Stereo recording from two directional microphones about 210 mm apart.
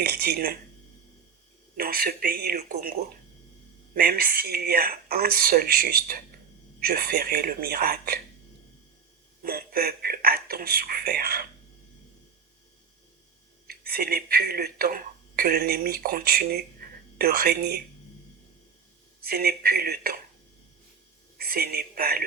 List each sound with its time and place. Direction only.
0.0 s speech: 45° right (ahead or behind)
1.7 s speech: 45° right (ahead or behind)
3.9 s speech: 45° right (ahead or behind)
9.4 s speech: 45° right (ahead or behind)
13.7 s speech: 45° right (ahead or behind)
19.2 s speech: 45° right (ahead or behind)
21.3 s a woman's voice: 45° right (ahead or behind)